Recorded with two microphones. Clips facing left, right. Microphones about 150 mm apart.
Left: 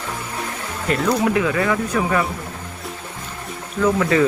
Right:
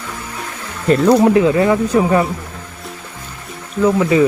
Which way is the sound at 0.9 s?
35° right (ahead or behind).